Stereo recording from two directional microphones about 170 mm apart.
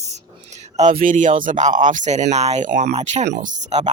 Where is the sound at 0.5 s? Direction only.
45° right (ahead or behind).